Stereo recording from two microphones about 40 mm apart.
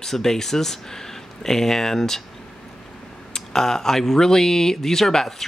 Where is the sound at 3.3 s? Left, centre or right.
Centre.